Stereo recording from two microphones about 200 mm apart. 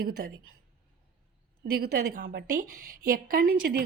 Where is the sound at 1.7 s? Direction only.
50° right (ahead or behind).